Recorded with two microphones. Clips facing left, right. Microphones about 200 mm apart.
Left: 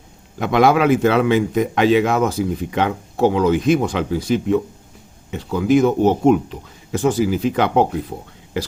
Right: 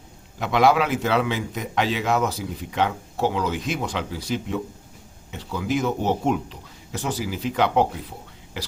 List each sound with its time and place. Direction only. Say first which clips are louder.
0.3 s a man's voice: left 4 dB; 55° left (ahead or behind)